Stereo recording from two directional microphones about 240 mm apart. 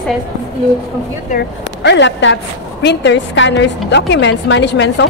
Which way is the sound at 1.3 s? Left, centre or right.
Left.